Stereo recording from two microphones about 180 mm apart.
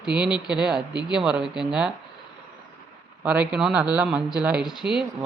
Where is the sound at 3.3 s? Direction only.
5° right (ahead or behind).